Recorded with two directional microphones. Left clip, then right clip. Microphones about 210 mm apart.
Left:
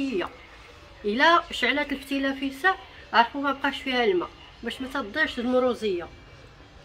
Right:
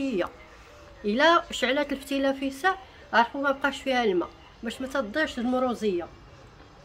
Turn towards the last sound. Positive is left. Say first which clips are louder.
# left 3 dB
turn(degrees=-55)  # may be behind; listen again after turning